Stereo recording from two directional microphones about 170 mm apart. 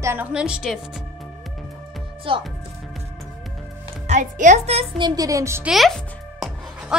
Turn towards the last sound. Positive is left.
turn(degrees=-5)  # may be behind; listen again after turning